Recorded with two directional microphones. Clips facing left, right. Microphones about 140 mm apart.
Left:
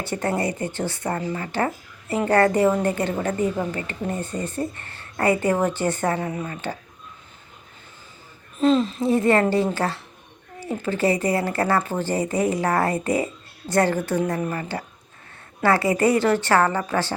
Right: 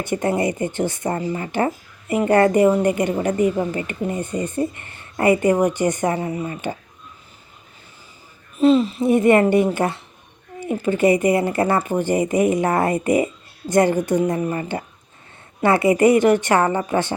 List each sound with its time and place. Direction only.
0.0 s speech: 20° right (ahead or behind)
8.5 s speech: 10° right (ahead or behind)
9.0 s speech: 20° right (ahead or behind)